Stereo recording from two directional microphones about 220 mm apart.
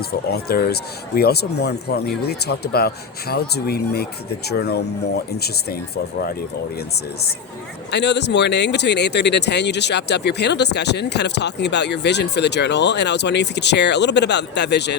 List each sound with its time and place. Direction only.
0.3 s speech: 45° left (ahead or behind)
7.9 s speech: 50° left (ahead or behind)